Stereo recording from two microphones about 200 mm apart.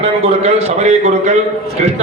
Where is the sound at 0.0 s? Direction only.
35° right (ahead or behind).